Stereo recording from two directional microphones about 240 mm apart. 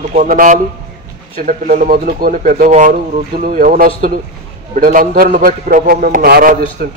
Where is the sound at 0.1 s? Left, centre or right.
Right.